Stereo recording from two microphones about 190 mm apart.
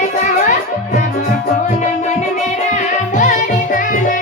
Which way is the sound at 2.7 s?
40° left (ahead or behind).